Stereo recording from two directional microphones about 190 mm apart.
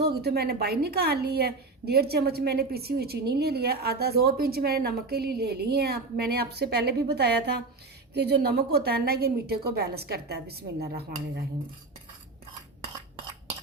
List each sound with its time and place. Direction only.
0.1 s a woman's voice: 55° right (ahead or behind)